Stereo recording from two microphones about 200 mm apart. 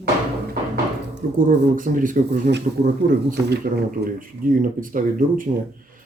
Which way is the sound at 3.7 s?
45° right (ahead or behind).